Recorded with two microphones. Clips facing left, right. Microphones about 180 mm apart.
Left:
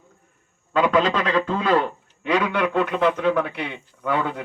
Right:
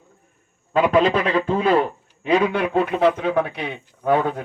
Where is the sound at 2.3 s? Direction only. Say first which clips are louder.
Right 3 dB; 35° right (ahead or behind).